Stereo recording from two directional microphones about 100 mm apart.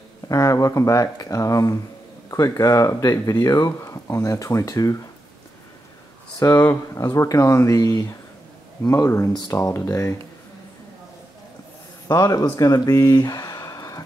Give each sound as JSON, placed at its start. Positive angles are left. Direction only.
{"t": 0.3, "sound": "speech", "side_deg": 35}
{"t": 6.5, "sound": "speech", "side_deg": 20}
{"t": 7.0, "sound": "speech", "side_deg": 30}
{"t": 12.1, "sound": "speech", "side_deg": 40}